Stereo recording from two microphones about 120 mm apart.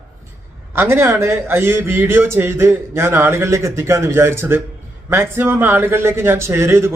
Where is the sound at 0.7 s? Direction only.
20° right (ahead or behind).